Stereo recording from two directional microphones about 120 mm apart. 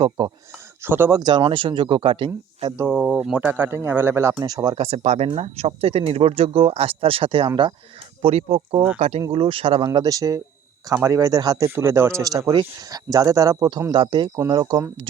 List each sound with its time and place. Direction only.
0.2 s speech: 45° right (ahead or behind)
0.8 s a man's voice: 20° right (ahead or behind)
1.1 s speech: 35° right (ahead or behind)
2.9 s a man's voice: 10° right (ahead or behind)
4.4 s speech: 30° right (ahead or behind)
4.8 s speech: 60° right (ahead or behind); by 7.7 s 45° right (ahead or behind)
8.2 s speech: 55° right (ahead or behind)
9.3 s speech: 50° right (ahead or behind)
9.8 s a man's voice: 30° right (ahead or behind)